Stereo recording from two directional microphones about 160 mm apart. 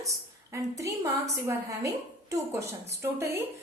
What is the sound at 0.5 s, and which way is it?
A woman's voice, 20° right (ahead or behind).